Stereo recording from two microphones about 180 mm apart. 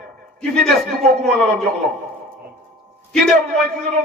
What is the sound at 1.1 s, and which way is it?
Speech, 5° left (ahead or behind).